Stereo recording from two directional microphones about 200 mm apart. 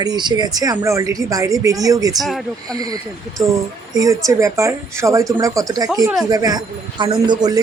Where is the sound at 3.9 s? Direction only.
15° right (ahead or behind).